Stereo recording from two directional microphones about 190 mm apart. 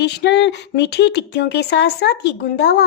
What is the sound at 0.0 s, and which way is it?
Speech, 65° left (ahead or behind).